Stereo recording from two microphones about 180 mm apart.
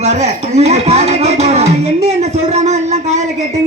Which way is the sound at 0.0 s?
40° right (ahead or behind).